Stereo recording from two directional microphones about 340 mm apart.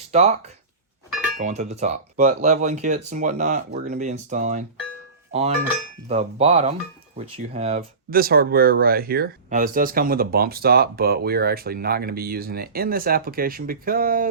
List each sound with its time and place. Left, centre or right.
0.1 s speech: centre
6.1 s speech: centre